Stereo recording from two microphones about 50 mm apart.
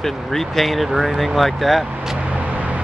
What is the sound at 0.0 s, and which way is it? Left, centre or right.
Speech, centre.